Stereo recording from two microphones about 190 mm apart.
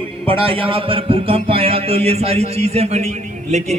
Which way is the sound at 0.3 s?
30° right (ahead or behind).